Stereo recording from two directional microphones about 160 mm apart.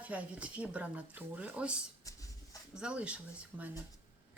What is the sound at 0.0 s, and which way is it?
Speech, 10° right (ahead or behind).